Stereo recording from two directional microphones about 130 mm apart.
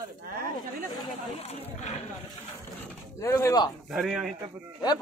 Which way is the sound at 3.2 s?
20° left (ahead or behind).